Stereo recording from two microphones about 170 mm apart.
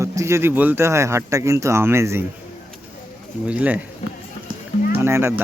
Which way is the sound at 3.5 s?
10° right (ahead or behind).